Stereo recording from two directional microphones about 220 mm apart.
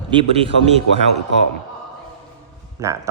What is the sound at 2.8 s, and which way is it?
Speech, 15° right (ahead or behind).